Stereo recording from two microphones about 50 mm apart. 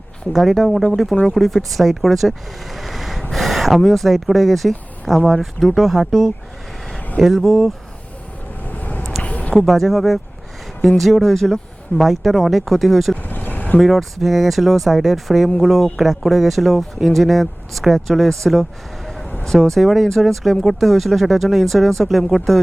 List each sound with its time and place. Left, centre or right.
0.3 s speech: centre
8.6 s vehicle: left
9.2 s a sound: left
9.6 s speech: centre
13.2 s vehicle: left
13.7 s speech: centre
19.7 s speech: centre